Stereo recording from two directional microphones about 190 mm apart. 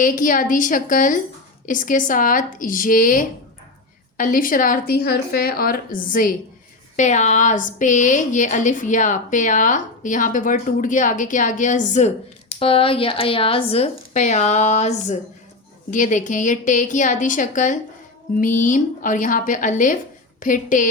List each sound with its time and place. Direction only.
0.0 s a woman's voice: 45° left (ahead or behind)